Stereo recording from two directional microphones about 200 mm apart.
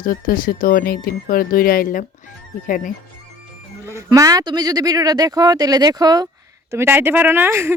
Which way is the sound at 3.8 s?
15° right (ahead or behind).